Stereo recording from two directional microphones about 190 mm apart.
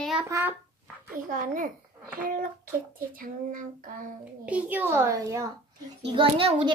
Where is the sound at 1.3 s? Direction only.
45° right (ahead or behind).